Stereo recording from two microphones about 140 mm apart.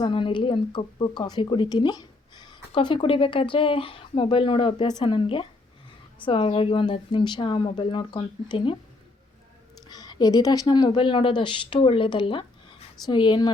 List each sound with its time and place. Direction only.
0.0 s a woman's voice: 35° left (ahead or behind)
9.9 s a woman's voice: 30° left (ahead or behind)